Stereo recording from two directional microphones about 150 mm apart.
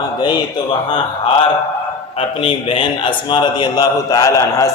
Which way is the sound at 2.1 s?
35° left (ahead or behind).